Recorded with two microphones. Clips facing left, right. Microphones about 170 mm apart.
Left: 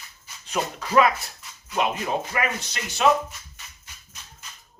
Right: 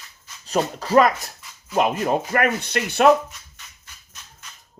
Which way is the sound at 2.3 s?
55° right (ahead or behind).